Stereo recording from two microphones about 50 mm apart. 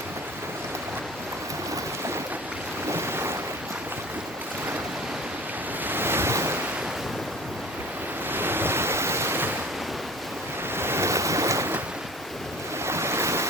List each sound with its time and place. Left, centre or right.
2.9 s boat: right
5.9 s waves: right
8.3 s waves: right
10.8 s waves: right
12.8 s waves: right